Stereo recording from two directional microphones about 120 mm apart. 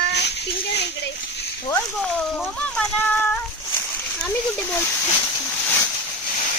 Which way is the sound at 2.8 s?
10° left (ahead or behind).